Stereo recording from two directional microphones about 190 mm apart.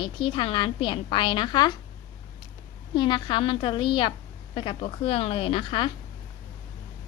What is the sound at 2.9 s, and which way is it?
A woman's voice, 25° left (ahead or behind).